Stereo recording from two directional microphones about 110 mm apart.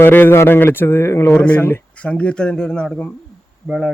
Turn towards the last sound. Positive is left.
turn(degrees=-5)  # may be behind; listen again after turning